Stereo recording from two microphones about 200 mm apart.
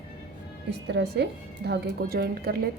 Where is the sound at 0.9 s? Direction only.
55° right (ahead or behind).